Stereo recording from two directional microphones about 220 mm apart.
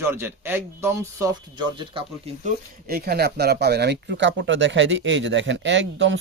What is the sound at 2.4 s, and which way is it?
Speech, 40° right (ahead or behind).